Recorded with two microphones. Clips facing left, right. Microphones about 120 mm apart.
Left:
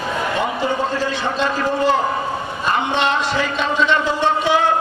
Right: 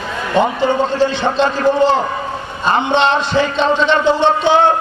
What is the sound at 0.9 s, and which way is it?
A man's voice, 30° right (ahead or behind).